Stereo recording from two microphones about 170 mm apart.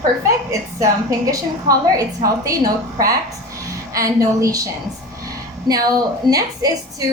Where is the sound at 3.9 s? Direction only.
20° right (ahead or behind).